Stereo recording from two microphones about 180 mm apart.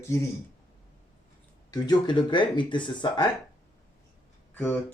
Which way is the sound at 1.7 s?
25° left (ahead or behind).